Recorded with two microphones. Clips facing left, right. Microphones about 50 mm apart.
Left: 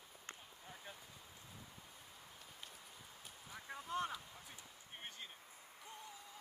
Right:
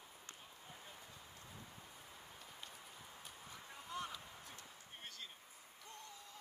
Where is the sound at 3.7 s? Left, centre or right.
Left.